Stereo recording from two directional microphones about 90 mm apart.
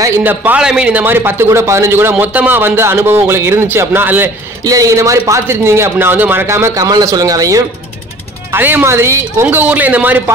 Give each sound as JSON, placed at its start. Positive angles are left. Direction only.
{"t": 0.2, "sound": "speech", "side_deg": -20}
{"t": 4.6, "sound": "a man's voice", "side_deg": -40}
{"t": 8.5, "sound": "speech", "side_deg": -20}